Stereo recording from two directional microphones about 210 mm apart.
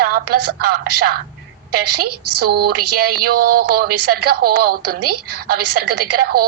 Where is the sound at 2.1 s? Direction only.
90° right.